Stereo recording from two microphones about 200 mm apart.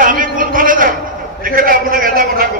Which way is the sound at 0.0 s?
45° right (ahead or behind).